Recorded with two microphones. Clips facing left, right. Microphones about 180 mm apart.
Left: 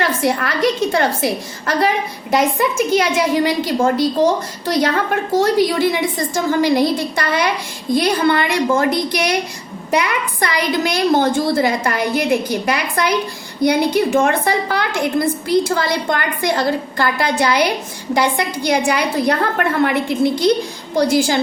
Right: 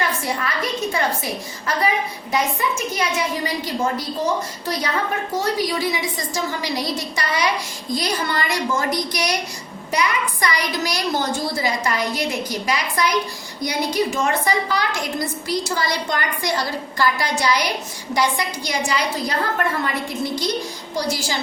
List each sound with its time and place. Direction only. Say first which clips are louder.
0.0 s a woman's voice: left 6 dB; 75° left (ahead or behind)
4.7 s a woman's voice: left 7 dB; 80° left; by 21.3 s 55° left (ahead or behind)